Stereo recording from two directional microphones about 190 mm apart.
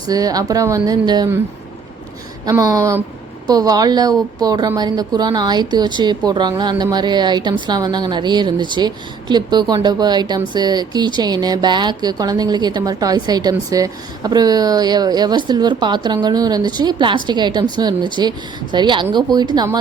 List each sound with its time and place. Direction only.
0.1 s speech: 20° right (ahead or behind)
2.5 s speech: 20° right (ahead or behind)